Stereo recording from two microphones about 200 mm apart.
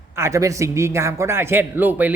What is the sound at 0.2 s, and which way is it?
A man's voice, 15° right (ahead or behind).